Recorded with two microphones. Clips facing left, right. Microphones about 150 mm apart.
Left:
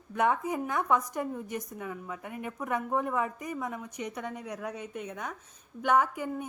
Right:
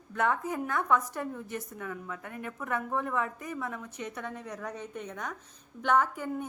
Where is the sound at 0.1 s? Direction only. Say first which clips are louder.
Left 2 dB; 15° left (ahead or behind).